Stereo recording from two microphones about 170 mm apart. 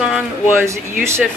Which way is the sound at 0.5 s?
15° right (ahead or behind).